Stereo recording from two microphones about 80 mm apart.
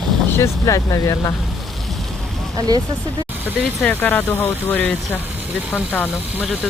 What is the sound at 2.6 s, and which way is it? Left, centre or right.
Speech, right.